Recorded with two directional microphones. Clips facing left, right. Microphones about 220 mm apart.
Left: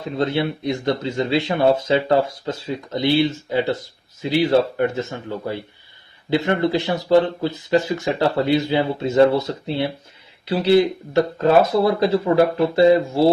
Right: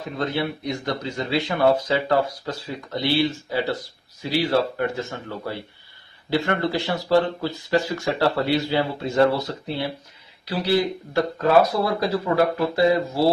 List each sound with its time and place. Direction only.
0.2 s speech: 25° left (ahead or behind)